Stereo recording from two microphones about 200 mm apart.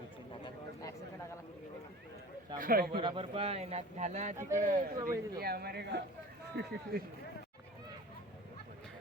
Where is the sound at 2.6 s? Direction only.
45° right (ahead or behind).